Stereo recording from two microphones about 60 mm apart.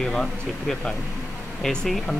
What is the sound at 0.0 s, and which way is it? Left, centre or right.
Speech, centre.